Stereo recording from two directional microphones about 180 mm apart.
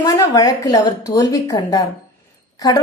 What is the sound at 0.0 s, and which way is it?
A woman's voice, 20° left (ahead or behind).